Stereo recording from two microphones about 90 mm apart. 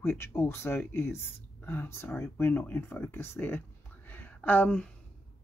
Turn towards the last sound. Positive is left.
turn(degrees=15)  # may be behind; listen again after turning